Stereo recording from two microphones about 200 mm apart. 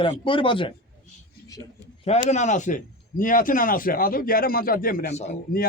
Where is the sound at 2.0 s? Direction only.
35° left (ahead or behind).